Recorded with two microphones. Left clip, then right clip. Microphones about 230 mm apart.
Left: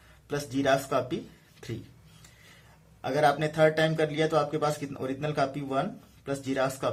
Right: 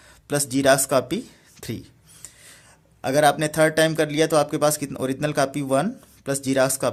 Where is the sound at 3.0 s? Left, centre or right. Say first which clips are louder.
Right 6 dB; right.